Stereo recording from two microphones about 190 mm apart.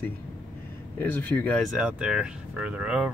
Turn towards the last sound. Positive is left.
turn(degrees=-5)  # may be behind; listen again after turning